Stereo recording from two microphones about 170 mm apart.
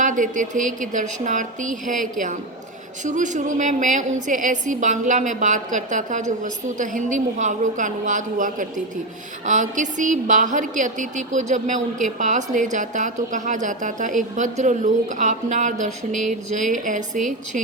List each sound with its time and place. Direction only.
0.0 s a woman's voice: 50° right (ahead or behind)